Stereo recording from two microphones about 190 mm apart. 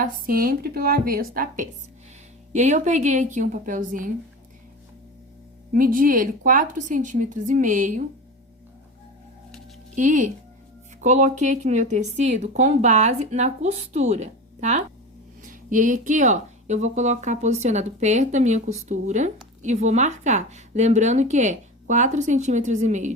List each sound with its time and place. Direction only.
0.0 s a woman's voice: 50° right (ahead or behind)
5.7 s a woman's voice: 45° right (ahead or behind)
9.9 s speech: 40° right (ahead or behind)